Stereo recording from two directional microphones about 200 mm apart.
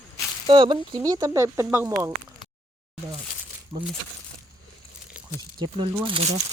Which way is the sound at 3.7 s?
30° right (ahead or behind).